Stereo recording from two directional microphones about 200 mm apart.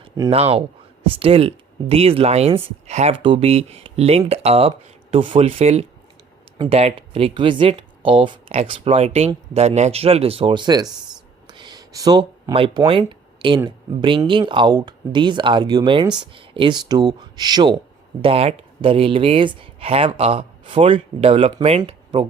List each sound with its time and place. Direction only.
0.0 s speech: 30° right (ahead or behind)
11.4 s a sound: 20° right (ahead or behind)
13.6 s speech: 20° right (ahead or behind)